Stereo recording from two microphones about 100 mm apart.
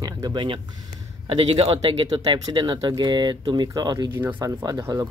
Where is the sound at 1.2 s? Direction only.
65° right (ahead or behind).